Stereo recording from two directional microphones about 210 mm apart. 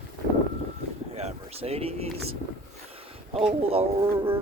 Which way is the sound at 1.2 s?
30° right (ahead or behind).